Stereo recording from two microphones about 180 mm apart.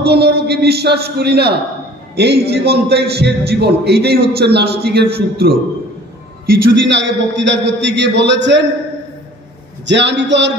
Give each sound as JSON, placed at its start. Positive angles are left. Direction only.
{"t": 0.0, "sound": "a man's voice", "side_deg": -65}
{"t": 6.4, "sound": "a man's voice", "side_deg": -85}
{"t": 9.8, "sound": "a man's voice", "side_deg": -80}